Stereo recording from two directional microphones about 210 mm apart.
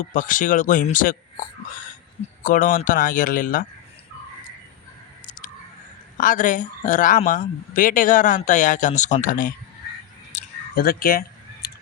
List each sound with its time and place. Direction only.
0.0 s speech: 40° left (ahead or behind)
2.4 s speech: 40° left (ahead or behind)
6.1 s speech: 40° left (ahead or behind)
10.3 s a sound: 45° left (ahead or behind)